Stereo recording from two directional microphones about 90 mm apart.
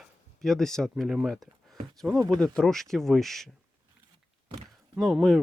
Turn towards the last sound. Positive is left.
turn(degrees=0)  # may be behind; listen again after turning